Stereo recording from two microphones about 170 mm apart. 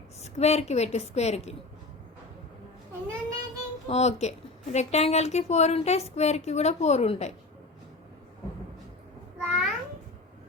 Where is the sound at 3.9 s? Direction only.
40° left (ahead or behind).